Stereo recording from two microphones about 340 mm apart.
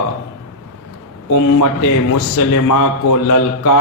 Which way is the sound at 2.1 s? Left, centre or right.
Left.